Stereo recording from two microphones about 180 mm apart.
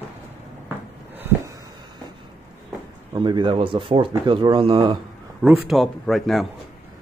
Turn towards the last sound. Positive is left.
turn(degrees=0)  # may be behind; listen again after turning